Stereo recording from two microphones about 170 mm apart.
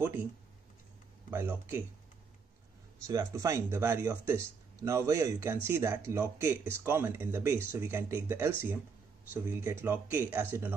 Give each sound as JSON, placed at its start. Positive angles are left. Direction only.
{"t": 1.3, "sound": "speech", "side_deg": -15}
{"t": 3.1, "sound": "speech", "side_deg": -20}